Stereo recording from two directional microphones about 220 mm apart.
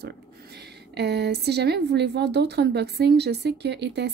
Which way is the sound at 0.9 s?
50° right (ahead or behind).